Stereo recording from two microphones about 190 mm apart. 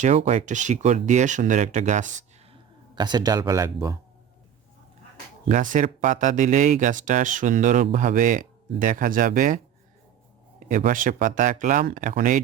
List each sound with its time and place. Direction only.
0.0 s speech: 40° right (ahead or behind)
2.9 s speech: 25° right (ahead or behind)
5.5 s speech: 40° right (ahead or behind)
10.6 s speech: 45° right (ahead or behind)